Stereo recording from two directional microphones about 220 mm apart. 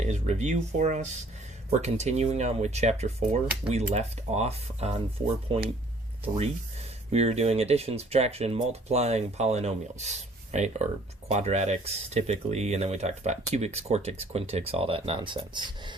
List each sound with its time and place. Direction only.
0.0 s speech: 30° right (ahead or behind)
6.2 s speech: 30° right (ahead or behind)